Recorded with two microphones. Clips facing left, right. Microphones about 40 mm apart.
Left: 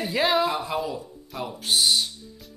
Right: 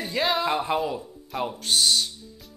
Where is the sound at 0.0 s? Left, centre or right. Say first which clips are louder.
Left 3 dB; centre.